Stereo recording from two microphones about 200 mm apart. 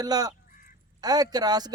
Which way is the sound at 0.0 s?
20° right (ahead or behind).